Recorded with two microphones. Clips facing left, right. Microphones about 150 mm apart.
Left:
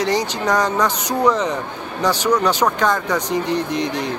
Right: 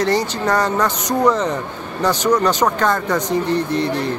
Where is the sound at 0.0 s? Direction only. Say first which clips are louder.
Right 1 dB; 15° left (ahead or behind).